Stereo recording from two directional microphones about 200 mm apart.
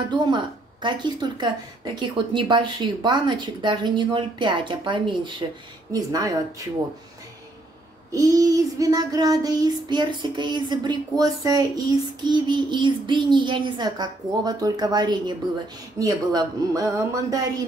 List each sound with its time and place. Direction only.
0.1 s child singing: 25° right (ahead or behind)
5.9 s speech: 20° right (ahead or behind)
8.1 s child singing: 15° right (ahead or behind)
16.0 s speech: 20° right (ahead or behind)